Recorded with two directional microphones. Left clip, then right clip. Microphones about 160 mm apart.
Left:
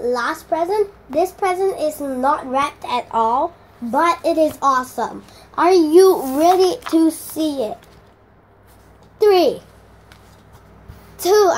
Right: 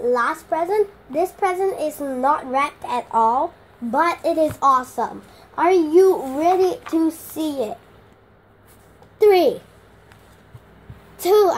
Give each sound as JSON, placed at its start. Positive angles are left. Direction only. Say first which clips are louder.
{"t": 0.0, "sound": "a child's voice", "louder": "right 1 dB", "side_deg": 5}
{"t": 5.6, "sound": "a child's voice", "louder": "left 3 dB", "side_deg": 25}
{"t": 6.9, "sound": "child singing", "louder": "left 4 dB", "side_deg": 20}
{"t": 7.3, "sound": "a child's voice", "louder": "left 3 dB", "side_deg": 5}
{"t": 9.2, "sound": "a child's voice", "louder": "left 1 dB", "side_deg": -5}
{"t": 11.1, "sound": "a child's voice", "louder": "left 2 dB", "side_deg": -5}